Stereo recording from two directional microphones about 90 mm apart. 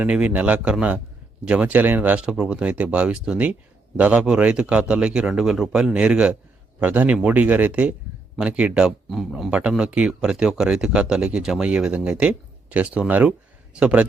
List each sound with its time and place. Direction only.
0.0 s a man's voice: 15° right (ahead or behind)